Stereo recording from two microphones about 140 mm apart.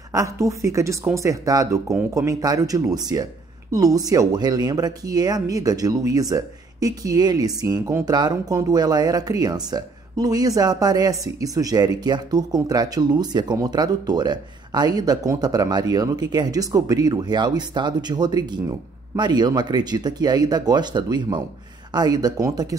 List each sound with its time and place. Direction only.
0.1 s speech: 25° right (ahead or behind)